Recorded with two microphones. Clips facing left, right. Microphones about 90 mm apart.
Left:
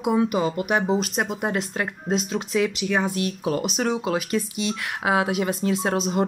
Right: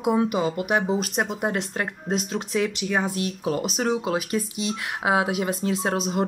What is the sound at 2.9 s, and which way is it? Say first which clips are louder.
Speech: left 1 dB; 25° right (ahead or behind).